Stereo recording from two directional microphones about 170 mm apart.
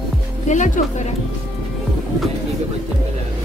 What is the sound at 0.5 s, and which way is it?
Speech, 45° left (ahead or behind).